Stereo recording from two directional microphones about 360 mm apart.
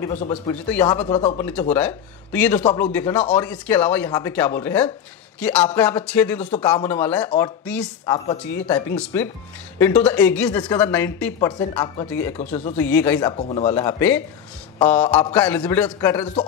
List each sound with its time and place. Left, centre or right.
0.1 s speech: centre
0.7 s a man's voice: centre
0.9 s speech: centre
1.4 s a man's voice: centre